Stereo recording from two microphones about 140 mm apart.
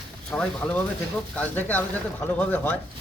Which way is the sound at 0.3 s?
10° left (ahead or behind).